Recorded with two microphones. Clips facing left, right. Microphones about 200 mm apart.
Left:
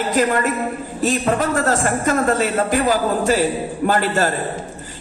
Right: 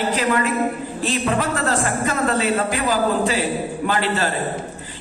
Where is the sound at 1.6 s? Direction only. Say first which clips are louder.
Left 3 dB; 45° left (ahead or behind).